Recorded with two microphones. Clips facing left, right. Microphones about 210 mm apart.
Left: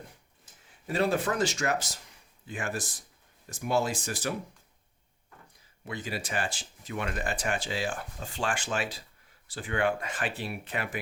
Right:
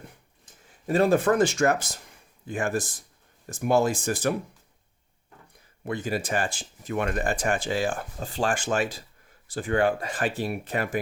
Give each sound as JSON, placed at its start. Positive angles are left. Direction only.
{"t": 0.9, "sound": "speech", "side_deg": -45}
{"t": 5.8, "sound": "speech", "side_deg": -50}